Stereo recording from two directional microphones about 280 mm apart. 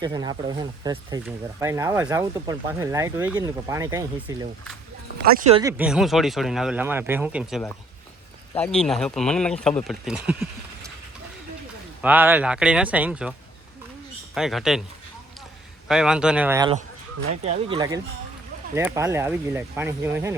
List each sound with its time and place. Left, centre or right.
0.0 s speech: centre
5.5 s speech: centre
12.0 s speech: centre
14.3 s speech: centre
15.9 s speech: centre